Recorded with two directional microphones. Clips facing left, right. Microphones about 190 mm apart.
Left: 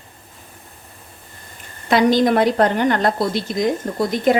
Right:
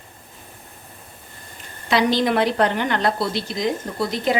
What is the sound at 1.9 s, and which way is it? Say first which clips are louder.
Speech: left 4 dB; 50° left (ahead or behind).